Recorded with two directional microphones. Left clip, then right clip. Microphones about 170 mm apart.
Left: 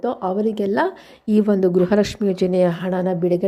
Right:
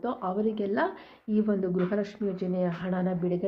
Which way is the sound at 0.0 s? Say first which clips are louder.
Left 8 dB; 45° left (ahead or behind).